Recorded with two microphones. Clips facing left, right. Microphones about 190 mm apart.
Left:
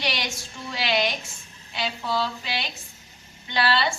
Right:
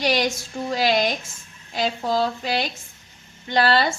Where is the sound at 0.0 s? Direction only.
45° right (ahead or behind).